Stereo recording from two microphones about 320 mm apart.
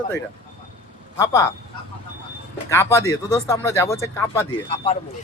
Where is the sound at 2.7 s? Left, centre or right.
Centre.